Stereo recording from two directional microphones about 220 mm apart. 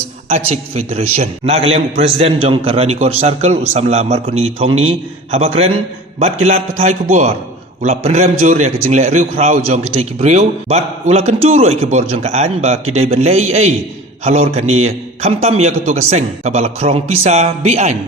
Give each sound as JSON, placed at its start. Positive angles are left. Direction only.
{"t": 0.3, "sound": "a man's voice", "side_deg": -30}